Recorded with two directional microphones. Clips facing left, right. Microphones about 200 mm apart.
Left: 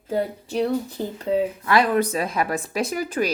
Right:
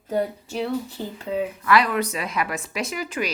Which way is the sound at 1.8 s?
50° left (ahead or behind).